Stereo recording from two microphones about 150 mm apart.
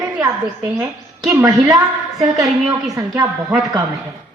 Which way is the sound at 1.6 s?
25° right (ahead or behind).